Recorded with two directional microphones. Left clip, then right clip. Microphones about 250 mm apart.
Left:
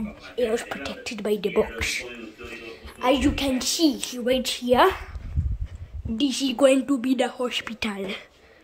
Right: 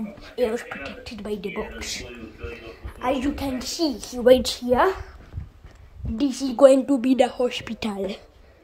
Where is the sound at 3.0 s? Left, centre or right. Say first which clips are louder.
Left 3 dB; centre.